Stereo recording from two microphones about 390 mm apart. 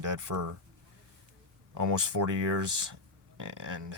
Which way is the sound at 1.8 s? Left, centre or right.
Right.